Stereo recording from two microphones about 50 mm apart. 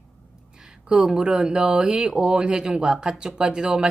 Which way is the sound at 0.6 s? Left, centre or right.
Centre.